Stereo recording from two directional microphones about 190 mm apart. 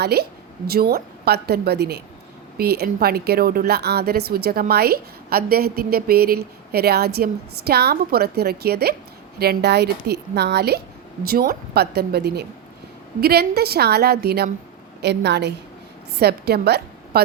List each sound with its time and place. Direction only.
0.0 s a woman's voice: 60° right (ahead or behind)